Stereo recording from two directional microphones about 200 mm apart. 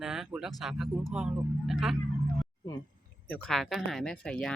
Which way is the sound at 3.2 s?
5° left (ahead or behind).